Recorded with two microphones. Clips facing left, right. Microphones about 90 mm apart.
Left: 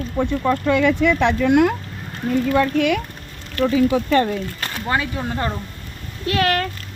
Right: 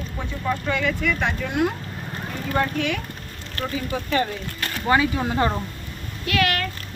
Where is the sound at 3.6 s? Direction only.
90° left.